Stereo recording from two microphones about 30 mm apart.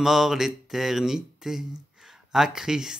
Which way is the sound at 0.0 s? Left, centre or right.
Centre.